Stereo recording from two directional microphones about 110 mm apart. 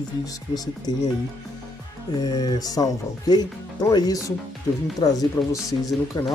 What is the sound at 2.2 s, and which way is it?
Speech, 35° left (ahead or behind).